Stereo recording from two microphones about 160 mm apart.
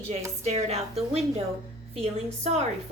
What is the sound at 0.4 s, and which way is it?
A woman's voice, 40° right (ahead or behind).